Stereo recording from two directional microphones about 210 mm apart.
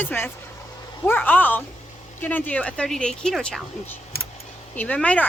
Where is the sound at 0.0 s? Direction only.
10° left (ahead or behind).